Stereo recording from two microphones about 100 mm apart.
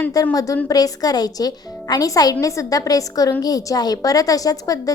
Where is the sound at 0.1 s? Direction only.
40° left (ahead or behind).